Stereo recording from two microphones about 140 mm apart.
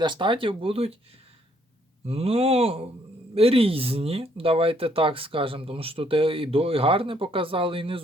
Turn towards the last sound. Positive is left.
turn(degrees=-40)  # may be behind; listen again after turning